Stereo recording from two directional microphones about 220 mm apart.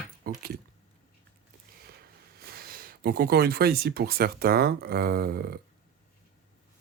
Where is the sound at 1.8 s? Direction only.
45° right (ahead or behind).